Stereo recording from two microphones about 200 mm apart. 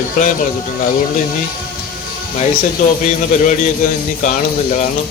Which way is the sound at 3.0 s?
40° left (ahead or behind).